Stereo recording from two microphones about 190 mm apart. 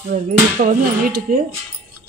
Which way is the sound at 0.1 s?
45° right (ahead or behind).